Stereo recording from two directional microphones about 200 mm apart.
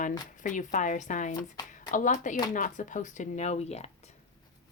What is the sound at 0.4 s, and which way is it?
Speech, 40° left (ahead or behind).